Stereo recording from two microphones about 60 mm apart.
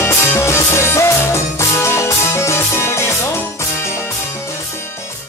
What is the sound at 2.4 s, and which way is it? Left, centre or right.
Music, left.